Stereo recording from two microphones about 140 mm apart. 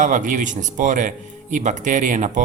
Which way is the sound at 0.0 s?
65° right (ahead or behind).